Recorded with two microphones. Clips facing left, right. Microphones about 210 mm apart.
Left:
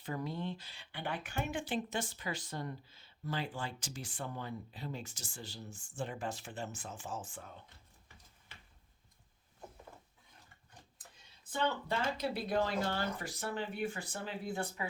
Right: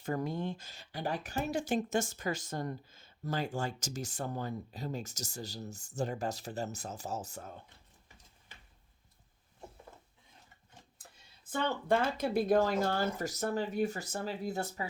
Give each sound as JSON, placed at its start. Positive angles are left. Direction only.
{"t": 0.0, "sound": "speech", "side_deg": -45}
{"t": 11.5, "sound": "speech", "side_deg": -50}